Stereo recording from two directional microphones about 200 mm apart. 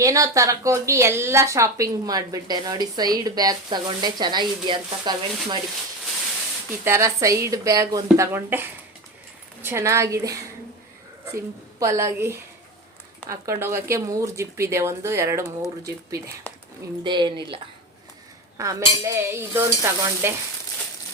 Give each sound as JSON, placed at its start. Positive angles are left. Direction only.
{"t": 0.0, "sound": "a woman's voice", "side_deg": -15}
{"t": 6.8, "sound": "a woman's voice", "side_deg": -15}
{"t": 11.8, "sound": "a woman's voice", "side_deg": -15}
{"t": 18.5, "sound": "a woman's voice", "side_deg": -15}